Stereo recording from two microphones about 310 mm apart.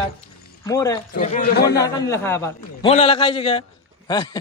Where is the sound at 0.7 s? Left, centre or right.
Centre.